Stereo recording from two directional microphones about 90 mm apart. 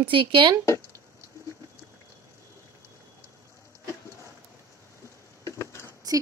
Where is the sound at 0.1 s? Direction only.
65° right (ahead or behind).